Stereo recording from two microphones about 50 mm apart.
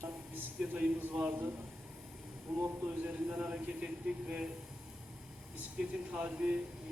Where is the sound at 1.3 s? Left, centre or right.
Right.